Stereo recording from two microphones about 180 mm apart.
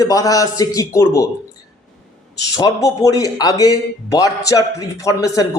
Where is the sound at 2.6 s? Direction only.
20° left (ahead or behind).